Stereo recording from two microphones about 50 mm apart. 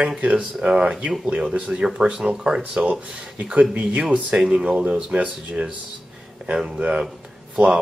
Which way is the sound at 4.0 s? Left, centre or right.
Centre.